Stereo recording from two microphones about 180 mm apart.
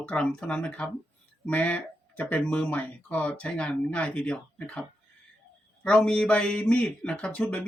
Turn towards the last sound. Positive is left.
turn(degrees=10)  # may be behind; listen again after turning